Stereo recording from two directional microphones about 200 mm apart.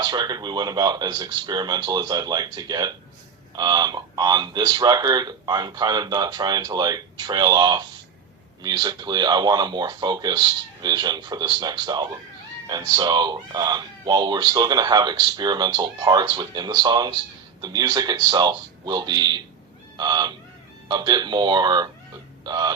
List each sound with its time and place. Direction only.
0.0 s speech: 20° right (ahead or behind)